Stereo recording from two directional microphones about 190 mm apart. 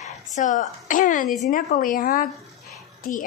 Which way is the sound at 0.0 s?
40° left (ahead or behind).